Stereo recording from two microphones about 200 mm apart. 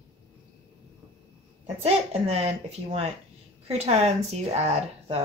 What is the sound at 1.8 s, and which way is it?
Speech, 30° right (ahead or behind).